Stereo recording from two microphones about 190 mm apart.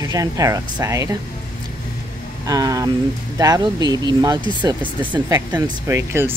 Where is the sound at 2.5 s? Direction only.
20° right (ahead or behind).